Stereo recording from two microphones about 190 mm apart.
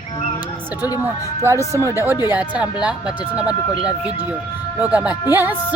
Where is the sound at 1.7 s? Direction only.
15° right (ahead or behind).